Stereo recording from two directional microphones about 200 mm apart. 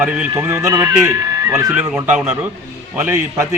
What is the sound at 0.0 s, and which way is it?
A man's voice, 5° right (ahead or behind).